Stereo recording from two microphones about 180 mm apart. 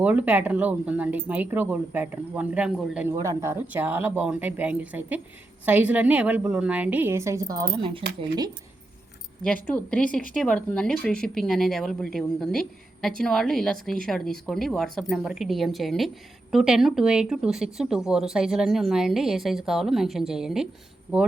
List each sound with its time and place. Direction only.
0.0 s speech: 10° right (ahead or behind); by 8.0 s 30° right (ahead or behind)
9.6 s speech: 10° left (ahead or behind)